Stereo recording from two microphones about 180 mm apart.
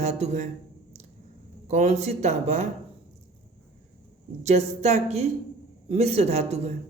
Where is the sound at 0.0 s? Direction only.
40° right (ahead or behind).